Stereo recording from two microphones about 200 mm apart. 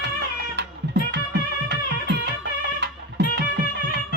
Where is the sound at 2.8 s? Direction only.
60° right (ahead or behind).